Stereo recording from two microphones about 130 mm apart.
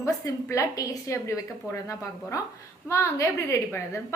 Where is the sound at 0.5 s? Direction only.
25° left (ahead or behind).